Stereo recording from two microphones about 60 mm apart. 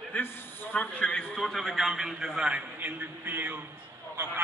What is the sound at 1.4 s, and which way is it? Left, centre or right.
A man's voice, centre.